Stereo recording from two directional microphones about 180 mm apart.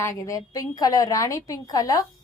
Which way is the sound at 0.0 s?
20° left (ahead or behind).